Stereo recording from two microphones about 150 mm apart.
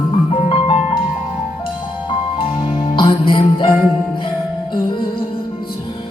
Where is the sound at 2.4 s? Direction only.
35° left (ahead or behind).